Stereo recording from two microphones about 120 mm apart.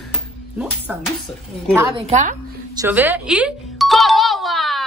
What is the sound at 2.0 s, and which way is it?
Speech, 80° right.